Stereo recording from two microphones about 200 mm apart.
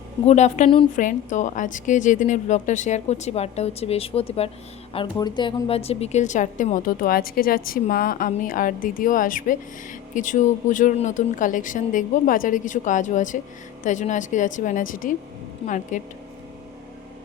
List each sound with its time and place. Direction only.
0.3 s a woman's voice: 35° left (ahead or behind)